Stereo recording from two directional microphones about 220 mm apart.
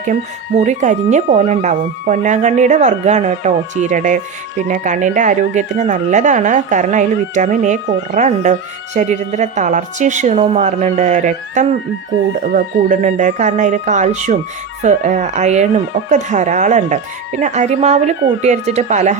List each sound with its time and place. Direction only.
0.6 s speech: 35° right (ahead or behind)